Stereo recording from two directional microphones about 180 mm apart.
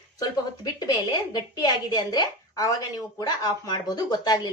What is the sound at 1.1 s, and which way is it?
Speech, 20° left (ahead or behind).